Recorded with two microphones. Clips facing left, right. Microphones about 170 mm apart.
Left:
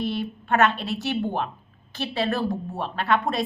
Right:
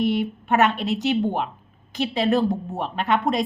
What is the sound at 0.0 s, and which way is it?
A woman's voice, 20° right (ahead or behind).